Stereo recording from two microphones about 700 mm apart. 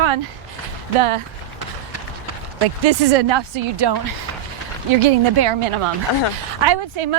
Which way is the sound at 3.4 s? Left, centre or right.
Right.